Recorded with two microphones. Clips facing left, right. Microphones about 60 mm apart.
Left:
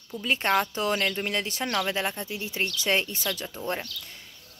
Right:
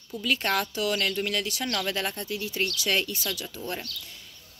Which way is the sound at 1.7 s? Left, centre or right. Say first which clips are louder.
Left 4 dB; left.